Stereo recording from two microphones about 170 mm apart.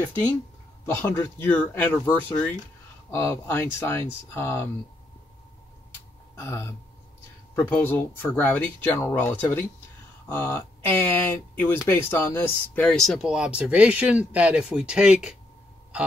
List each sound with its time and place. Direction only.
0.8 s speech: 15° left (ahead or behind)
6.3 s a sound: 15° left (ahead or behind)
7.5 s speech: 15° left (ahead or behind); by 15.3 s 5° right (ahead or behind)